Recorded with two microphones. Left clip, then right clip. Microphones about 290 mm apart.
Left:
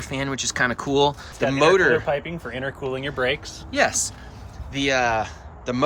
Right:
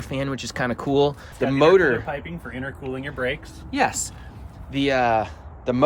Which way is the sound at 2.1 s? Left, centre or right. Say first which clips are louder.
Left 6 dB; left.